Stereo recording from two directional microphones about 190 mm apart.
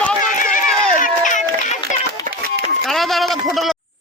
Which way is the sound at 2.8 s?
Centre (ahead or behind).